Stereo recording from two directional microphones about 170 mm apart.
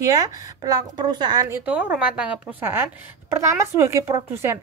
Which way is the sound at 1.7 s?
10° right (ahead or behind).